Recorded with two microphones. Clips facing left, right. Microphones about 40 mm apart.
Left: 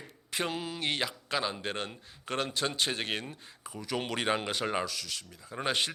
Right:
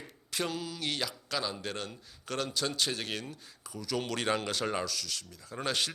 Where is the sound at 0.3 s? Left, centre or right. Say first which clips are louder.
Left 1 dB; left.